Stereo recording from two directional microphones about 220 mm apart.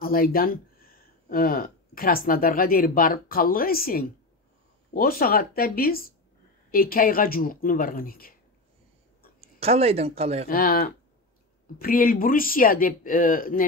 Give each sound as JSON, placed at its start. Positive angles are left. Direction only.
{"t": 0.0, "sound": "speech", "side_deg": 40}
{"t": 9.4, "sound": "speech", "side_deg": -25}
{"t": 10.5, "sound": "speech", "side_deg": 40}